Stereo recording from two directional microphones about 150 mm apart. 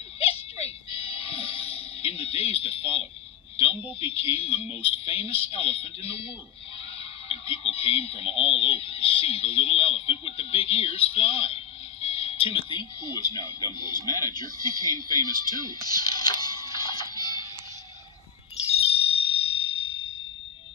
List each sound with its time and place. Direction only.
0.2 s music: 40° left (ahead or behind)
4.0 s speech: 40° left (ahead or behind)
13.0 s speech: 20° left (ahead or behind)
18.7 s chime: 40° left (ahead or behind)